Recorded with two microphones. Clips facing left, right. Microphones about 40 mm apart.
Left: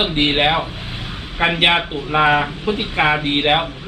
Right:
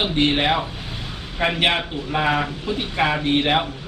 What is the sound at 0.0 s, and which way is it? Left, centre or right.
Speech, left.